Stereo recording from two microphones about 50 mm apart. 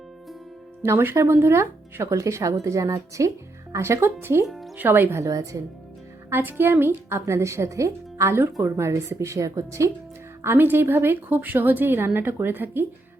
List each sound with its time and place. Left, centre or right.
0.8 s speech: right
1.5 s speech: right
4.0 s a woman's voice: right
4.4 s speech: centre
4.8 s a woman's voice: right
6.3 s a woman's voice: right
10.4 s a woman's voice: right